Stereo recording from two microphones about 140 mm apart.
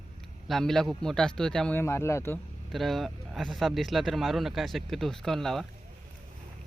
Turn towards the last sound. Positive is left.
turn(degrees=0)  # may be behind; listen again after turning